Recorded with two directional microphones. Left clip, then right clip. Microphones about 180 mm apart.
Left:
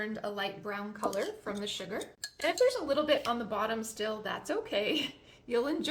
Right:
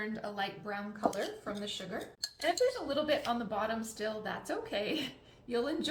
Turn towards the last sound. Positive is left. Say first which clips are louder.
# left 3 dB
turn(degrees=45)  # may be behind; listen again after turning